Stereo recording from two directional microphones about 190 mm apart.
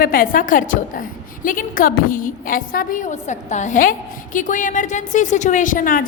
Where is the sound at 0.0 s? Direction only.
50° left (ahead or behind).